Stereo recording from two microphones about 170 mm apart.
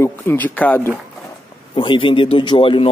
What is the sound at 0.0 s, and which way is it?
Speech, 10° left (ahead or behind).